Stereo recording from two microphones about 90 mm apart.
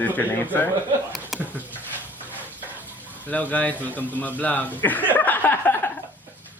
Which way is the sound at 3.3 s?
15° left (ahead or behind).